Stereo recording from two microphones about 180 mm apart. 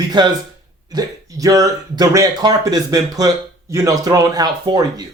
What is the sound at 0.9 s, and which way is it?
Speech, 20° right (ahead or behind).